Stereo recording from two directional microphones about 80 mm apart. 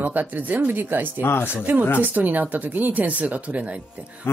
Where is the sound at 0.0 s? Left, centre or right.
Right.